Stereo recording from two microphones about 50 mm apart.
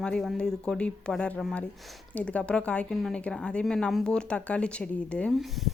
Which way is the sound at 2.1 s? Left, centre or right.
Left.